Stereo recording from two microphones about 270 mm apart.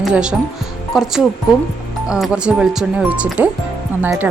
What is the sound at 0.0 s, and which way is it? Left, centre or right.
Speech, centre.